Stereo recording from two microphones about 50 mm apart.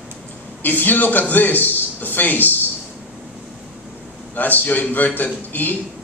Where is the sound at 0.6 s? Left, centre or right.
Left.